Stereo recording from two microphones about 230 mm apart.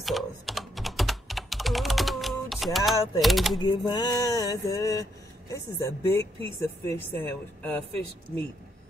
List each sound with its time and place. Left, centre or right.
0.0 s typing: centre
3.5 s speech: centre